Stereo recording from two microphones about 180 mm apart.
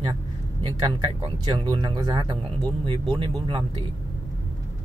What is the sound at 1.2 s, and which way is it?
Speech, 25° right (ahead or behind).